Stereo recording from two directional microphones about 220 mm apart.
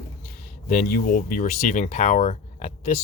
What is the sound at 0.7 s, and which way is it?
Speech, 40° left (ahead or behind).